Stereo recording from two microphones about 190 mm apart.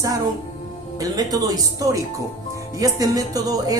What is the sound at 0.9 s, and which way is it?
A woman's voice, 20° right (ahead or behind).